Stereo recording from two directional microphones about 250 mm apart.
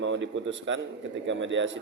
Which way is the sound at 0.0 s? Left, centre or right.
Right.